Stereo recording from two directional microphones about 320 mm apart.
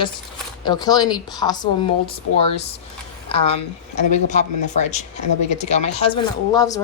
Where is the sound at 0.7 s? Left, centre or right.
Centre.